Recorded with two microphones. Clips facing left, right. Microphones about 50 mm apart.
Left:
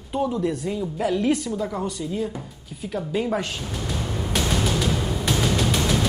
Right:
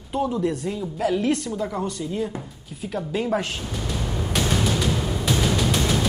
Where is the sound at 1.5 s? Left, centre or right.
Centre.